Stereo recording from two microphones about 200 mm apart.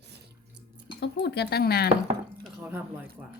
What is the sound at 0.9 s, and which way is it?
Speech, 55° left (ahead or behind).